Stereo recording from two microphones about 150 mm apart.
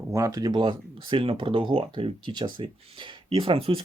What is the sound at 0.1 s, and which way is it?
Speech, 20° right (ahead or behind).